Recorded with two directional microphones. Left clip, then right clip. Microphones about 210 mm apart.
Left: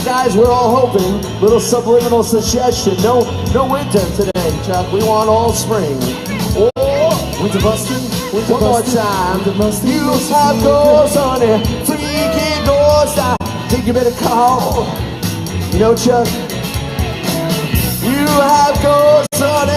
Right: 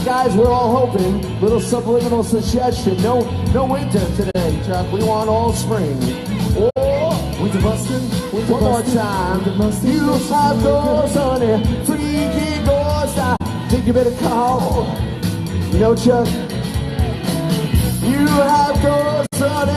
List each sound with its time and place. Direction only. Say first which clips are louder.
0.1 s speech: left 3 dB; 25° left (ahead or behind)
8.4 s music: left 4 dB; 25° left (ahead or behind)
15.7 s speech: left 3 dB; 25° left (ahead or behind)
18.0 s music: left 3 dB; 25° left (ahead or behind)